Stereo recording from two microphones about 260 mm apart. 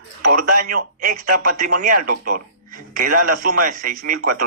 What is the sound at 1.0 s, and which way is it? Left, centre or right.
Speech, right.